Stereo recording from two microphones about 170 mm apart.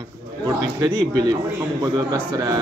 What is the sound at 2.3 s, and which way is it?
Speech, 20° right (ahead or behind).